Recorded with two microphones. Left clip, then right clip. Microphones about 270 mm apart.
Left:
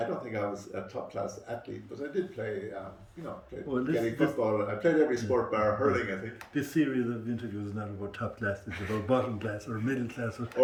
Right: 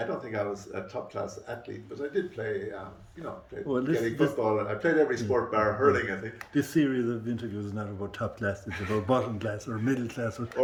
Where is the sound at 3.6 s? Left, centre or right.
Right.